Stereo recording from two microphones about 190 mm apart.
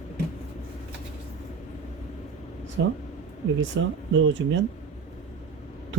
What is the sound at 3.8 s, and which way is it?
Speech, 70° right (ahead or behind).